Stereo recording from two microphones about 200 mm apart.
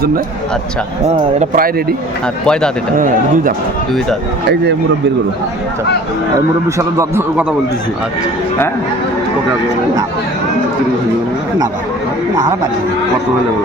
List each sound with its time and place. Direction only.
1.4 s speech: 45° right (ahead or behind)
2.2 s speech: 5° left (ahead or behind)
3.0 s speech: 40° right (ahead or behind)
6.7 s a man's voice: 15° right (ahead or behind)